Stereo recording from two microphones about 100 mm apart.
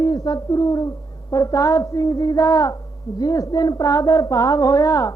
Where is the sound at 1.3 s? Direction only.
35° left (ahead or behind).